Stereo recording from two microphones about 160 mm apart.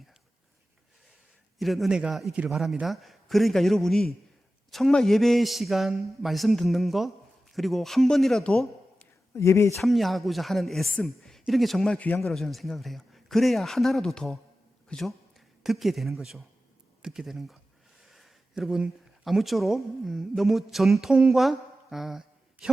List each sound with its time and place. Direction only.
1.5 s speech: centre (ahead or behind)
9.3 s speech: 15° left (ahead or behind)
9.8 s speech: centre (ahead or behind)